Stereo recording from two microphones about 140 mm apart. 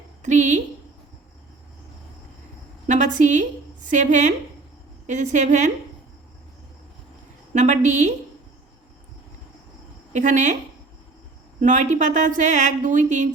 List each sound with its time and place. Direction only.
0.2 s a woman's voice: 60° right (ahead or behind)
2.8 s a woman's voice: 60° right (ahead or behind)
7.5 s a woman's voice: 60° right (ahead or behind)
10.1 s a woman's voice: 60° right (ahead or behind)
11.6 s a woman's voice: 60° right (ahead or behind)